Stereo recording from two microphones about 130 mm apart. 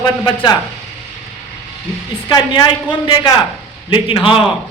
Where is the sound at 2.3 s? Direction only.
35° left (ahead or behind).